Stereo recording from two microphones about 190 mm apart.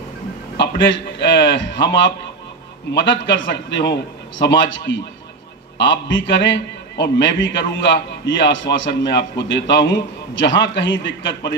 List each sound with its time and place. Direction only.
0.6 s a man's voice: 70° left (ahead or behind)
2.9 s a man's voice: 65° left (ahead or behind)
9.8 s a man's voice: 20° left (ahead or behind)
10.3 s a man's voice: 70° left (ahead or behind)